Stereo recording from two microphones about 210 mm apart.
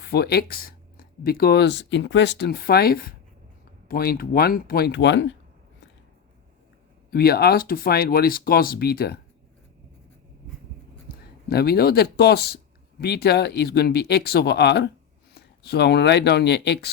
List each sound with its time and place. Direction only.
0.0 s speech: 50° left (ahead or behind)
7.1 s speech: 45° left (ahead or behind)
11.4 s speech: 50° left (ahead or behind)